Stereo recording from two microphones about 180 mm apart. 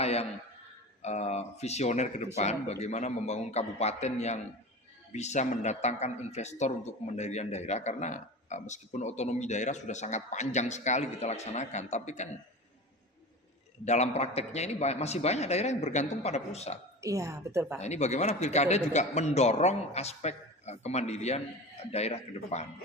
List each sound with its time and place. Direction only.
0.0 s a sound: 35° left (ahead or behind)
1.0 s a man's voice: 40° left (ahead or behind)
13.8 s a man's voice: 40° left (ahead or behind)
17.0 s a woman's voice: 15° right (ahead or behind)
17.7 s a man's voice: 40° left (ahead or behind)